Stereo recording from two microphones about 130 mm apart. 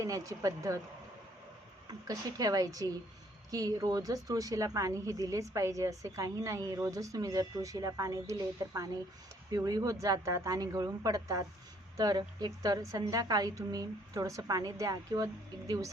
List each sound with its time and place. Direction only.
0.0 s a woman's voice: 25° right (ahead or behind)
1.9 s a woman's voice: 30° right (ahead or behind)